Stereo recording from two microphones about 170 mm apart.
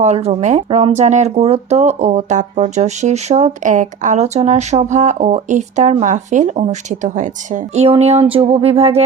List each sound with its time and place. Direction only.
0.0 s speech: 40° right (ahead or behind)